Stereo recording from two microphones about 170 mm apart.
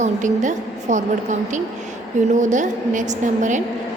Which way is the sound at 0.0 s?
45° right (ahead or behind).